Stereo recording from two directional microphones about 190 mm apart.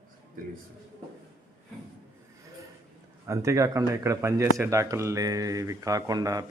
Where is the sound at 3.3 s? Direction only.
15° right (ahead or behind).